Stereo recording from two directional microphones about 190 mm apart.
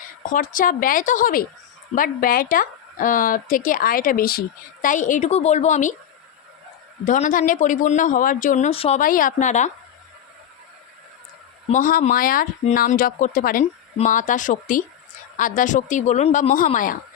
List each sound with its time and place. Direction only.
0.2 s speech: 45° left (ahead or behind)
7.0 s speech: 45° left (ahead or behind)
9.0 s speech: 45° left (ahead or behind)
11.7 s speech: 45° left (ahead or behind)